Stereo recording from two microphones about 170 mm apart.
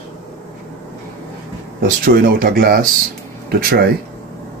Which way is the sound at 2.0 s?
60° right (ahead or behind).